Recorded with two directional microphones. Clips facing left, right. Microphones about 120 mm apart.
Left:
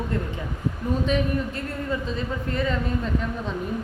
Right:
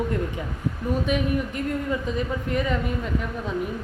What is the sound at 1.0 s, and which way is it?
A woman's voice, 15° right (ahead or behind).